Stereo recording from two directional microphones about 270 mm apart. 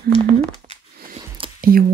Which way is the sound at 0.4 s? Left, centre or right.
Right.